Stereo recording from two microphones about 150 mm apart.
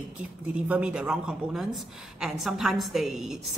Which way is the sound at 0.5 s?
5° right (ahead or behind).